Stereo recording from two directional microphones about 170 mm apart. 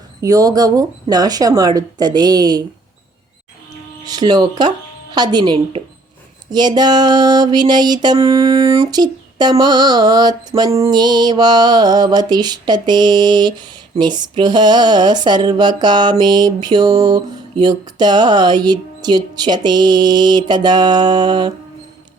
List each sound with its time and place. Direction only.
0.2 s speech: 20° right (ahead or behind)
4.0 s speech: 25° right (ahead or behind)